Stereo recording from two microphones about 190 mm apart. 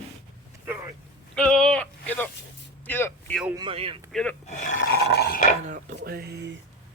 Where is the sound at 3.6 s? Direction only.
30° right (ahead or behind).